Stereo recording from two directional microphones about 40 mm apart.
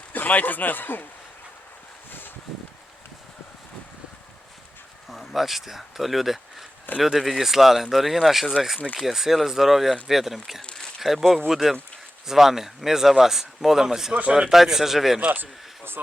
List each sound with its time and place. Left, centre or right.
0.1 s a man's voice: left
5.3 s speech: centre; by 14.5 s right
14.5 s speech: centre
15.4 s a sound: right